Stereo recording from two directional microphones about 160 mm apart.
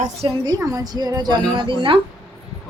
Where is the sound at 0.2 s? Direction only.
25° right (ahead or behind).